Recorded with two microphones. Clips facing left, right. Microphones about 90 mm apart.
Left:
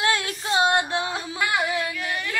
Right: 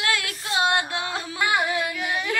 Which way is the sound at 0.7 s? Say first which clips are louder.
Left 2 dB; 20° left (ahead or behind).